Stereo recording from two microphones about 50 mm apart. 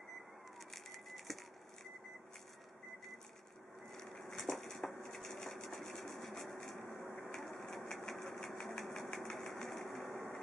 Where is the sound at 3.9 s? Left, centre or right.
Centre.